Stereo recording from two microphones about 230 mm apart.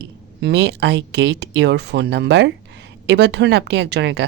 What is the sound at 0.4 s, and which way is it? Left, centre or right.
Speech, right.